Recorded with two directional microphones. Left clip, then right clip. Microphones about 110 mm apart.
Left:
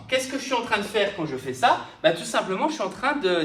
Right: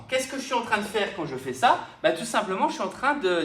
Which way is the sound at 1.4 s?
45° right (ahead or behind).